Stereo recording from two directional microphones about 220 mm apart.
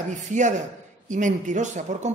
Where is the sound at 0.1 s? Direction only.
35° right (ahead or behind).